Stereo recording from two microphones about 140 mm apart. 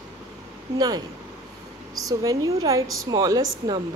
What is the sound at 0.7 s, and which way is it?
Speech, 30° right (ahead or behind).